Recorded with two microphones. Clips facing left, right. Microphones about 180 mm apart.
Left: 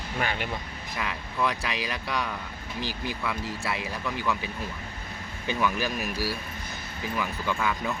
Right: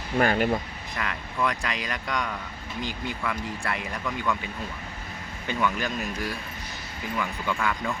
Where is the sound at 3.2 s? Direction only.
5° left (ahead or behind).